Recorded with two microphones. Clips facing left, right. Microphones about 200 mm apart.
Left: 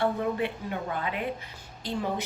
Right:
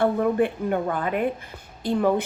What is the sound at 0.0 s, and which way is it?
A woman's voice, 50° right (ahead or behind).